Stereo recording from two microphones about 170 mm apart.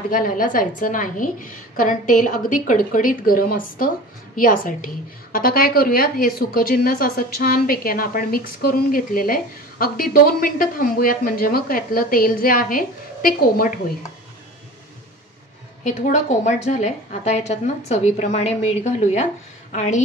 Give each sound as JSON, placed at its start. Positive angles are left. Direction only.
{"t": 0.1, "sound": "a woman's voice", "side_deg": 55}
{"t": 16.0, "sound": "a woman's voice", "side_deg": 45}